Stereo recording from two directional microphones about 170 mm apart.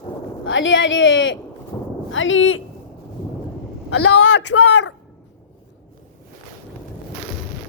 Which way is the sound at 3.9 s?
90° left.